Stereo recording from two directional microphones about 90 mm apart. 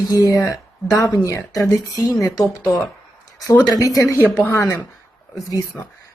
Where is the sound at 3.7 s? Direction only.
40° left (ahead or behind).